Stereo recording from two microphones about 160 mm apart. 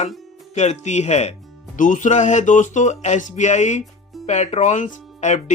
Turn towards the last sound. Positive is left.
turn(degrees=50)  # may be behind; listen again after turning